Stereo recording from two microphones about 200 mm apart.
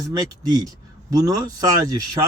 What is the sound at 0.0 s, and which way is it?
Speech, 20° right (ahead or behind).